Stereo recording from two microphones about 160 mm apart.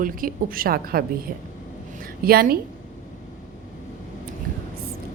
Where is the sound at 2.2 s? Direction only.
70° right (ahead or behind).